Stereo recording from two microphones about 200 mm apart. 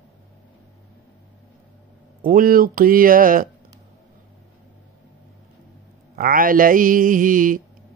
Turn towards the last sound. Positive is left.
turn(degrees=-40)  # may be behind; listen again after turning